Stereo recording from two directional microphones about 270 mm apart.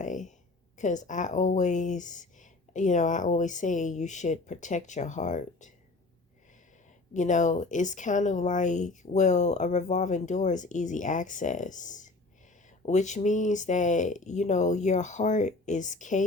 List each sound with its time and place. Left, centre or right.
0.0 s speech: left
7.1 s speech: left